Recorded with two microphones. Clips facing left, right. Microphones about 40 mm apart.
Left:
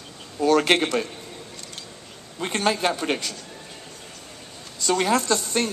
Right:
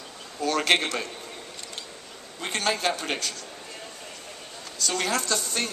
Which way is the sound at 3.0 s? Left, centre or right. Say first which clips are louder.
Left 4 dB; centre.